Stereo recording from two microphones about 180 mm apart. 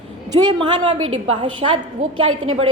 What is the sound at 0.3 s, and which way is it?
A woman's voice, 25° right (ahead or behind).